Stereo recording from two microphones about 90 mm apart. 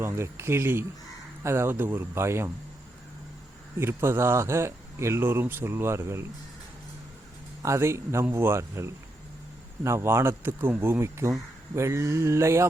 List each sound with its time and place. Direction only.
0.0 s speech: 30° right (ahead or behind)
3.8 s speech: 30° right (ahead or behind)
7.6 s a man's voice: 30° right (ahead or behind)